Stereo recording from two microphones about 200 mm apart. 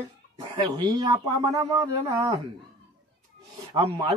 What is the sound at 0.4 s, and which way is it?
Speech, 25° right (ahead or behind).